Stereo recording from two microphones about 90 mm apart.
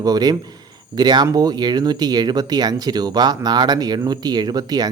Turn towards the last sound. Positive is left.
turn(degrees=-45)  # may be behind; listen again after turning